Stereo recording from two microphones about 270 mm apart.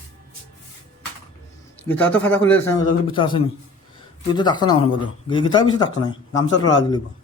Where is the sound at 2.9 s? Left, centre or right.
Centre.